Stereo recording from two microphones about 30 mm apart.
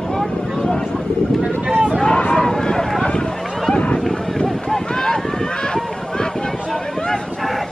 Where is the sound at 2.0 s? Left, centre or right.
Left.